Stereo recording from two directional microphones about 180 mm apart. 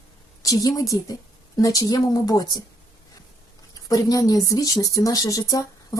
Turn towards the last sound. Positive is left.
turn(degrees=20)  # may be behind; listen again after turning